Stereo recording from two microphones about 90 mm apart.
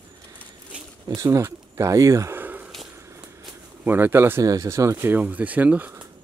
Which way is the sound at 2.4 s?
20° right (ahead or behind).